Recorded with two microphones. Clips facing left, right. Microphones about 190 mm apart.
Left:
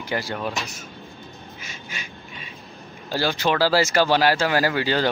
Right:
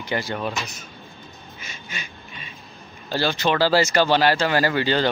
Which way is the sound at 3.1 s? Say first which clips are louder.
Even; 10° left (ahead or behind).